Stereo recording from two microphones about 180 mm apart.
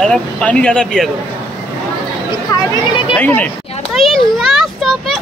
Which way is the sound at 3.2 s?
10° left (ahead or behind).